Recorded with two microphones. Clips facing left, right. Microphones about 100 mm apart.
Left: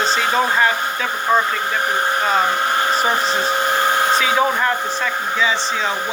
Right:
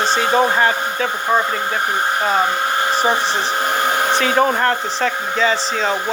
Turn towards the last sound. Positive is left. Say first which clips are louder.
# right 2 dB
turn(degrees=-55)  # may be behind; listen again after turning